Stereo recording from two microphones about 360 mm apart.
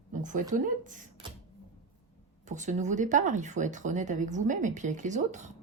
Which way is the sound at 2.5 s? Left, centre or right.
Centre.